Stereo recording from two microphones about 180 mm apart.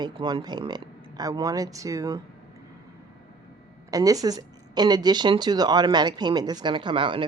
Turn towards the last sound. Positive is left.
turn(degrees=-30)  # may be behind; listen again after turning